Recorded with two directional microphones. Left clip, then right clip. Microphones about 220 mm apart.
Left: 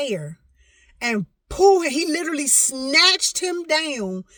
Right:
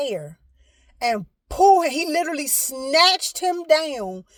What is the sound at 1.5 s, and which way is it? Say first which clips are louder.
Speech: right 1 dB; 15° left (ahead or behind).